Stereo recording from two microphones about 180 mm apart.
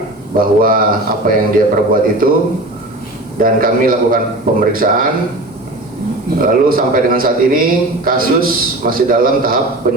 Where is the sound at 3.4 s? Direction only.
50° right (ahead or behind).